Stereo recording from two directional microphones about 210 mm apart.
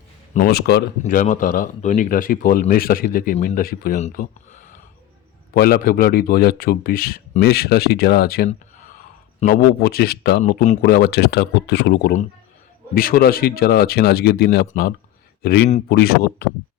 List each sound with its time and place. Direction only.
0.3 s speech: 45° left (ahead or behind)